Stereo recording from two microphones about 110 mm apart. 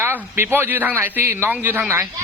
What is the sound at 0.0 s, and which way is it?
A man's voice, 20° right (ahead or behind).